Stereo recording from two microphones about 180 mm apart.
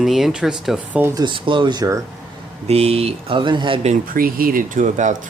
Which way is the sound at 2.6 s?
35° right (ahead or behind).